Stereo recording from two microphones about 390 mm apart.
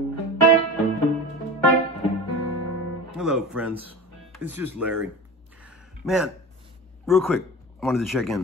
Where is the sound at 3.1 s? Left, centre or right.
Centre.